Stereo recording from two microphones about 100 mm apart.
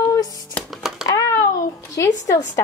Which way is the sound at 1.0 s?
35° left (ahead or behind).